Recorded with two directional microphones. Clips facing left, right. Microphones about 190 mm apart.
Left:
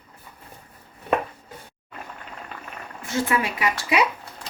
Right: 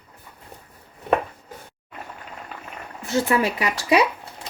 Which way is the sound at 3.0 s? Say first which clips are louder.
Right 3 dB; 35° right (ahead or behind).